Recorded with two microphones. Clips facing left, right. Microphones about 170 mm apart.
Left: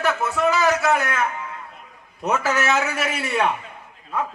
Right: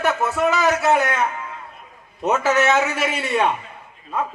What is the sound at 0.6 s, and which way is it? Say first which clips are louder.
Speech: right 2 dB; 25° right (ahead or behind).